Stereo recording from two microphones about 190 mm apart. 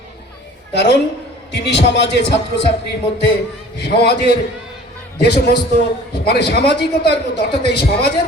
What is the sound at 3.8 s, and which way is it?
Speech, 55° left (ahead or behind).